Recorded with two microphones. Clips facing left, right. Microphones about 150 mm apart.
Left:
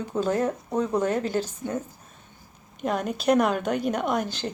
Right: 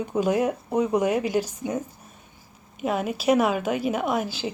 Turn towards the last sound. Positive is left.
turn(degrees=-5)  # may be behind; listen again after turning